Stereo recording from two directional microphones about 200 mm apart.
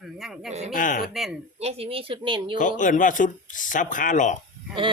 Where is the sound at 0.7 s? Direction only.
40° left (ahead or behind).